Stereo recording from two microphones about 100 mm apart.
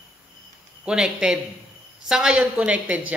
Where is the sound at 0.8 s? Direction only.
10° right (ahead or behind).